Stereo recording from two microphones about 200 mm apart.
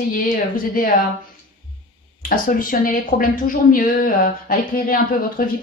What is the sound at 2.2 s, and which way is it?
Speech, 45° left (ahead or behind).